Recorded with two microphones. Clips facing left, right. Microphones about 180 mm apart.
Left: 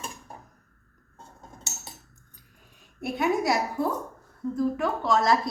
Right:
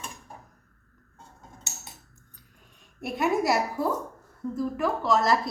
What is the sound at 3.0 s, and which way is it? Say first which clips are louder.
A woman's voice: even; centre (ahead or behind).